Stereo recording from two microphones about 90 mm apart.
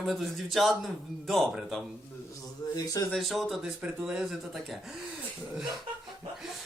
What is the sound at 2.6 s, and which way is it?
Speech, 40° left (ahead or behind).